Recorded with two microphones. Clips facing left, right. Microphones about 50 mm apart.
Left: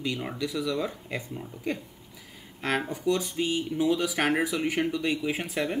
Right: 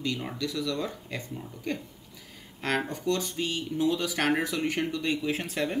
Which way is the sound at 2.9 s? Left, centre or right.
Centre.